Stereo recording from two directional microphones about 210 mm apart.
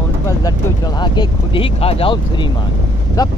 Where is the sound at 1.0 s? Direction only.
25° left (ahead or behind).